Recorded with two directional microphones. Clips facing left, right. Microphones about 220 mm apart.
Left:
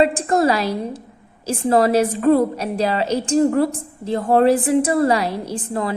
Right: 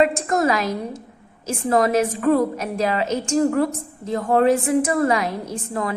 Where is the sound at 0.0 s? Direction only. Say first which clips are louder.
Left 2 dB; 30° left (ahead or behind).